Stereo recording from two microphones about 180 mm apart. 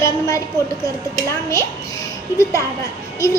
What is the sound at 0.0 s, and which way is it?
Speech, 15° left (ahead or behind).